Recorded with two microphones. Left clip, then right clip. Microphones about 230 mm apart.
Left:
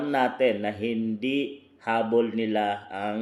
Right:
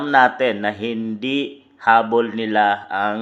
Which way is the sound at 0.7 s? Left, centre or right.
Right.